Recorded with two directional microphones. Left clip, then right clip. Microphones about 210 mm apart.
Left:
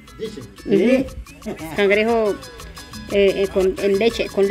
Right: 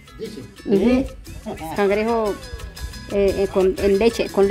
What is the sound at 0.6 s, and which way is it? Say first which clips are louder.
Speech: left 2 dB; centre (ahead or behind).